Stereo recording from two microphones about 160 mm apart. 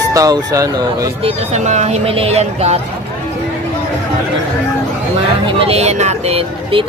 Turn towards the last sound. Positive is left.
turn(degrees=-35)  # may be behind; listen again after turning